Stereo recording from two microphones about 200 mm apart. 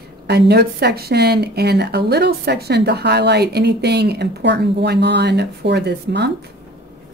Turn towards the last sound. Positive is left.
turn(degrees=-60)  # may be behind; listen again after turning